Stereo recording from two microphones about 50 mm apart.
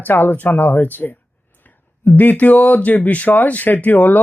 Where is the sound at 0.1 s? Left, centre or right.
Left.